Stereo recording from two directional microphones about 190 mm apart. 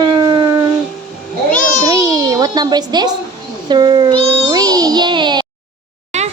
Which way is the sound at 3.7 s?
25° right (ahead or behind).